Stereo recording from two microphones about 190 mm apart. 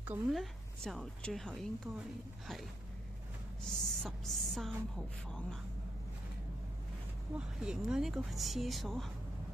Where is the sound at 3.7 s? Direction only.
5° left (ahead or behind).